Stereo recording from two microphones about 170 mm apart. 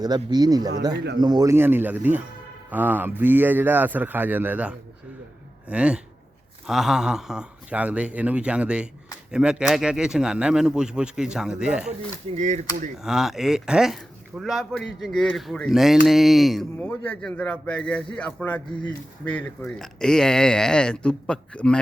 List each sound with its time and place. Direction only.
0.0 s speech: 25° right (ahead or behind); by 11.9 s 5° right (ahead or behind)
12.4 s speech: 45° right (ahead or behind)
13.0 s a man's voice: centre (ahead or behind)